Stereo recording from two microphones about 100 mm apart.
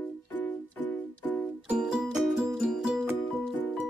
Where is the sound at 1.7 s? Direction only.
10° right (ahead or behind).